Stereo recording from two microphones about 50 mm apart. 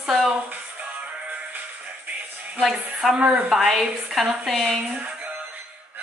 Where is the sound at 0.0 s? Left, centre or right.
Centre.